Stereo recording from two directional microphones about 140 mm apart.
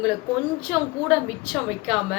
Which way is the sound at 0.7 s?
Centre (ahead or behind).